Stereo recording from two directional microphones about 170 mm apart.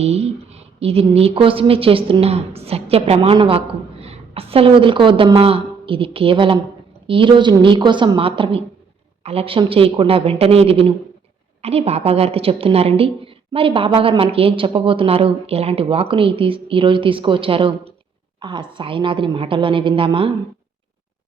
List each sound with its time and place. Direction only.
0.0 s a woman's voice: 40° right (ahead or behind)